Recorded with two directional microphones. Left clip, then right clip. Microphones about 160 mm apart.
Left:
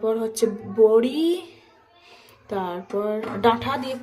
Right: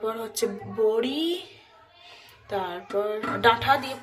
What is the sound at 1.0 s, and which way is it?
Speech, 30° left (ahead or behind).